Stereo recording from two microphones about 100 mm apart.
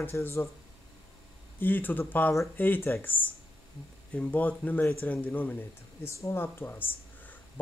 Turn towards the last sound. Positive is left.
turn(degrees=20)  # may be behind; listen again after turning